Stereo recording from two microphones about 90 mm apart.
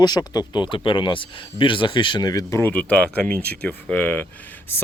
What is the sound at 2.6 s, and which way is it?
Speech, 20° left (ahead or behind).